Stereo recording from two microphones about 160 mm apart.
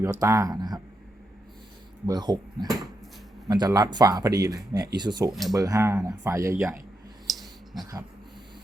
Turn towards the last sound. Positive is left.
turn(degrees=0)  # may be behind; listen again after turning